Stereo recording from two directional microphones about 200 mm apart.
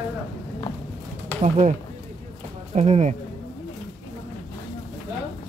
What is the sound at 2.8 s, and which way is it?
Speech, 35° right (ahead or behind).